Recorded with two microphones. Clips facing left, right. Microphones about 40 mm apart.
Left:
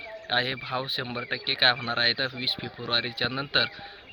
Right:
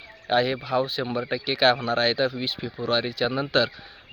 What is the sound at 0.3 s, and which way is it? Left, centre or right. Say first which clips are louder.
Speech: right 5 dB; left.